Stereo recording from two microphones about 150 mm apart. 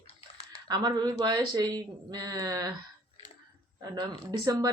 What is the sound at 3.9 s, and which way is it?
Speech, 25° right (ahead or behind).